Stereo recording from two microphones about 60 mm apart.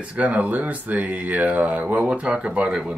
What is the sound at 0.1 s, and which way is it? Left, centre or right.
Speech, right.